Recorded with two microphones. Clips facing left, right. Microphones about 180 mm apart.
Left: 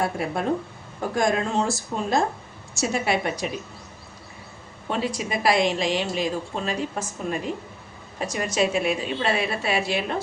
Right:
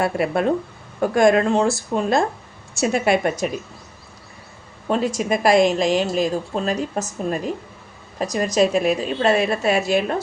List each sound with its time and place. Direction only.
0.0 s a woman's voice: 65° right (ahead or behind); by 3.5 s 50° right (ahead or behind)
4.9 s a woman's voice: 45° right (ahead or behind)